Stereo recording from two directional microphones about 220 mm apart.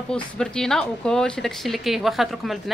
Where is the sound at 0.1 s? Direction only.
5° left (ahead or behind).